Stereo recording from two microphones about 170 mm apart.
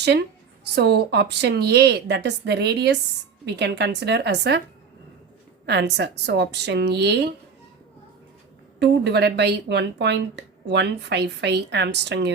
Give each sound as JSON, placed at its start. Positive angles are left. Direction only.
{"t": 0.8, "sound": "a woman's voice", "side_deg": -80}
{"t": 3.4, "sound": "speech", "side_deg": -90}
{"t": 5.6, "sound": "speech", "side_deg": -85}
{"t": 8.8, "sound": "speech", "side_deg": -80}